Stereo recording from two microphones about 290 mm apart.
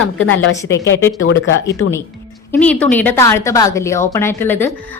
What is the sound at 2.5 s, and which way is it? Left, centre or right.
A woman's voice, centre.